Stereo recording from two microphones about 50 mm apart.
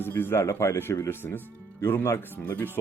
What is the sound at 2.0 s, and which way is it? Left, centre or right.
Speech, left.